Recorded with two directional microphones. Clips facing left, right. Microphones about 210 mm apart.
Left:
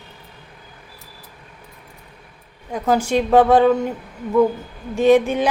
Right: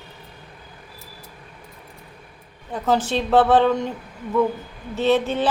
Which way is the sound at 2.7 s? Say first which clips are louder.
Left 3 dB; 10° left (ahead or behind).